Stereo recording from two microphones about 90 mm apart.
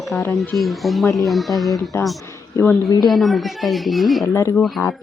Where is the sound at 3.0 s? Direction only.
Centre (ahead or behind).